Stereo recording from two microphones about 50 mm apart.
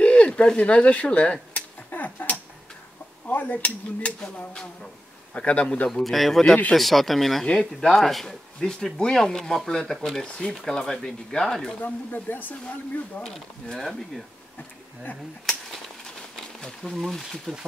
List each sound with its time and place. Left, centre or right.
0.0 s speech: left
1.5 s a sound: left
3.3 s speech: left
5.3 s a man's voice: left
5.9 s speech: centre
11.8 s speech: left
13.3 s speech: centre
16.9 s speech: centre